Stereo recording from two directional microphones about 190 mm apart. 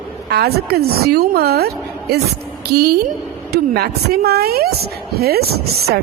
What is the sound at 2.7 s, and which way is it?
A woman's voice, 55° right (ahead or behind).